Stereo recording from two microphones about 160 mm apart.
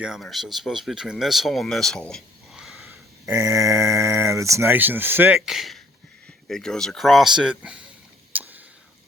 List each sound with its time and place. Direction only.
0.0 s speech: centre (ahead or behind)
3.2 s speech: 20° right (ahead or behind)
8.3 s a sound: 10° right (ahead or behind)